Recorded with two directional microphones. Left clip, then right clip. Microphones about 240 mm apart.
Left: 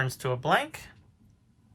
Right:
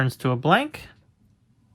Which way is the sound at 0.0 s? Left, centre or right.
Right.